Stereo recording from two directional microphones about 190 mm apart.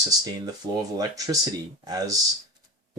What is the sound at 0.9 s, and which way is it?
Speech, 20° right (ahead or behind).